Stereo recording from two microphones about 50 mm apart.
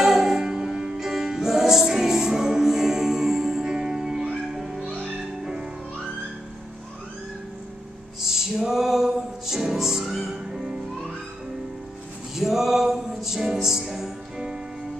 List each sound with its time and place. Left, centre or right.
0.0 s music: centre
8.2 s music: centre
12.4 s music: centre